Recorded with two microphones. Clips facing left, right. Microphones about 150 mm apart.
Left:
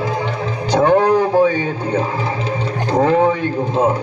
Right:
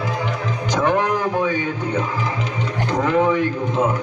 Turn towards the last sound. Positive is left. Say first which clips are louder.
# left 3 dB
turn(degrees=30)  # may be behind; listen again after turning